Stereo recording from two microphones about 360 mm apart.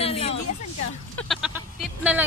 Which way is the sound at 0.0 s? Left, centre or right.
Centre.